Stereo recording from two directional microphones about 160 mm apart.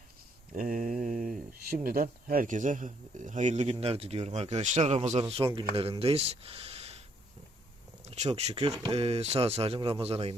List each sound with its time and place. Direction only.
0.5 s mantra: 60° right (ahead or behind)
1.8 s speech: 65° right (ahead or behind); by 5.2 s 45° right (ahead or behind)
5.5 s speech: 35° right (ahead or behind)
8.0 s speech: 45° right (ahead or behind)